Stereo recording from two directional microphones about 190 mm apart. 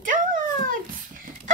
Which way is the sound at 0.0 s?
45° right (ahead or behind).